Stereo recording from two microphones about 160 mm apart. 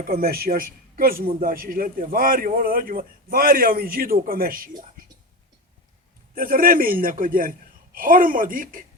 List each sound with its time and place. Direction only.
0.0 s a man's voice: 70° right (ahead or behind)
6.3 s a man's voice: 65° right (ahead or behind)